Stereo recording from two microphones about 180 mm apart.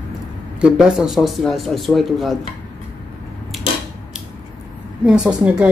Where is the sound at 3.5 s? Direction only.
Centre (ahead or behind).